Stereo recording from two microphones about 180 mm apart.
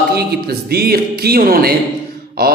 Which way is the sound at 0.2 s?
60° right (ahead or behind).